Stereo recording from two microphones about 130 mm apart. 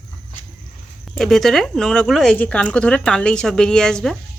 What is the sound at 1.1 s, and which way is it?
A woman's voice, centre (ahead or behind).